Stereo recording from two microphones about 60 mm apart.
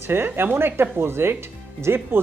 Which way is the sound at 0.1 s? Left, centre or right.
Right.